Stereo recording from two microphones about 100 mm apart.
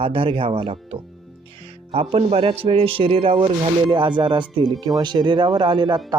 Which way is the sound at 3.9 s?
50° right (ahead or behind).